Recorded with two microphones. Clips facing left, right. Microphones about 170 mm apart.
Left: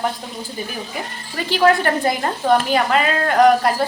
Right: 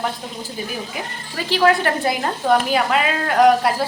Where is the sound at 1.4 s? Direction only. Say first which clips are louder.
Left 1 dB; centre (ahead or behind).